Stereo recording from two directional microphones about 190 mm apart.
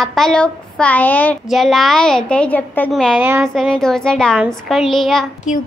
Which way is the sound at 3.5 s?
Centre (ahead or behind).